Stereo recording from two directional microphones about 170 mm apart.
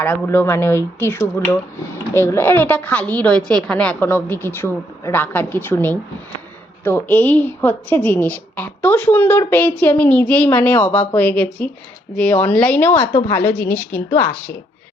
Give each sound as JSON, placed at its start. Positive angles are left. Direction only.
{"t": 0.0, "sound": "a woman's voice", "side_deg": 10}